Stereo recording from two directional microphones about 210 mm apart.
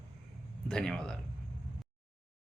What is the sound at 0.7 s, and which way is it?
Speech, 5° left (ahead or behind).